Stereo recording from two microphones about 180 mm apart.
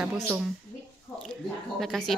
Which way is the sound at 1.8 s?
Centre (ahead or behind).